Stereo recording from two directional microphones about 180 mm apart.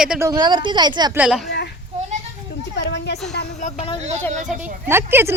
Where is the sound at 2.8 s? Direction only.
75° left (ahead or behind).